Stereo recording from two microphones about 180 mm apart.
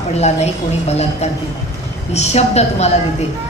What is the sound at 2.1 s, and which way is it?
Speech, 35° left (ahead or behind).